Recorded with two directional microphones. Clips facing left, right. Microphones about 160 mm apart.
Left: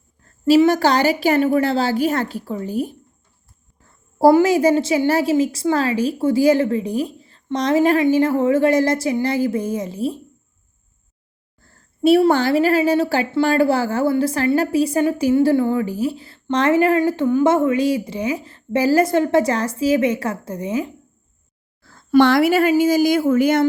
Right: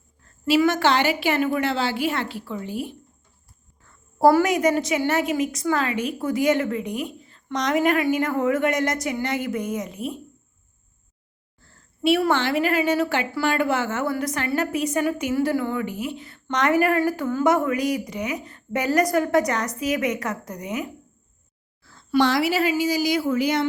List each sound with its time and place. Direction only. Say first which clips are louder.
0.6 s a woman's voice: left 4 dB; 35° left (ahead or behind)
4.3 s a woman's voice: left 5 dB; 25° left (ahead or behind)
11.6 s a sound: left 6 dB; 40° left (ahead or behind)
12.3 s a woman's voice: left 6 dB; 35° left (ahead or behind)
21.8 s a woman's voice: left 7 dB; 50° left (ahead or behind)